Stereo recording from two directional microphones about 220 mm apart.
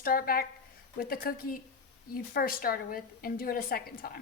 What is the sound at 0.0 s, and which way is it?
A woman's voice, 40° left (ahead or behind).